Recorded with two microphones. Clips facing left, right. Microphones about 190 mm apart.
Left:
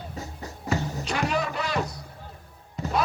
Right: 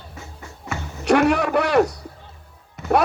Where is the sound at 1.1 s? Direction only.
65° right (ahead or behind).